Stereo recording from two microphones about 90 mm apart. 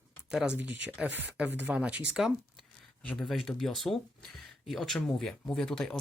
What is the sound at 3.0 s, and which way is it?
Speech, 15° left (ahead or behind).